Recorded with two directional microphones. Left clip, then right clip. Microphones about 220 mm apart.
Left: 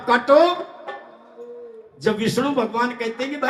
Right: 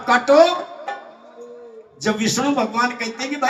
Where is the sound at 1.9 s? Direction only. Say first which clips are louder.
Even; 15° right (ahead or behind).